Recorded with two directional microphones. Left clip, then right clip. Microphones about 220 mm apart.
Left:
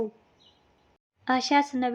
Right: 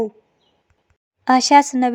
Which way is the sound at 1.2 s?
35° right (ahead or behind).